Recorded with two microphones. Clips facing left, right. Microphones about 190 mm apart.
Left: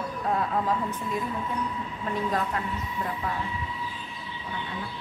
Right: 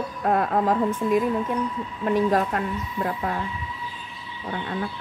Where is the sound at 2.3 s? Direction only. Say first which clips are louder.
Right 6 dB; 55° right (ahead or behind).